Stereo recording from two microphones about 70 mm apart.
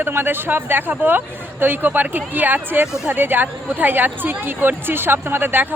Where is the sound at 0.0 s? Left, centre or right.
Right.